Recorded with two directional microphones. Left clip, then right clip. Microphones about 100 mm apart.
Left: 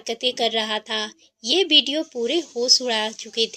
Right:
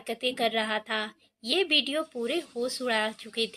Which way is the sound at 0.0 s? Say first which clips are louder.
Left 6 dB; 20° left (ahead or behind).